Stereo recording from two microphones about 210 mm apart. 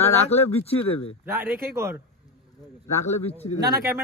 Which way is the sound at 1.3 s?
10° right (ahead or behind).